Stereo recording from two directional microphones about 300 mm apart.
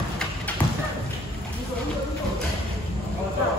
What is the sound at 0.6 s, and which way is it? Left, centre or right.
Clip-clop, centre.